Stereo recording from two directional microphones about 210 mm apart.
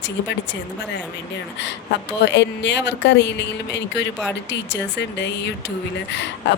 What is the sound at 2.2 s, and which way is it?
Speech, 55° left (ahead or behind).